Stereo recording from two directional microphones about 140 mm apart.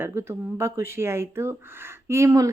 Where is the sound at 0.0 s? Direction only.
15° right (ahead or behind).